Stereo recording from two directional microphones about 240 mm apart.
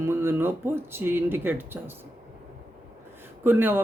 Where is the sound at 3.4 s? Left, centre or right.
Centre.